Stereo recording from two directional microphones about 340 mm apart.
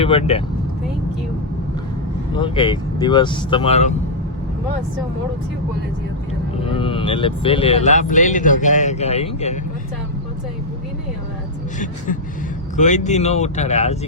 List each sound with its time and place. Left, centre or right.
0.0 s speech: centre
2.3 s speech: centre
6.7 s speech: centre
12.7 s speech: left